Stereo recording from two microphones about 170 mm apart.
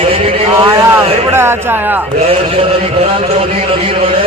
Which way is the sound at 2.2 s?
35° right (ahead or behind).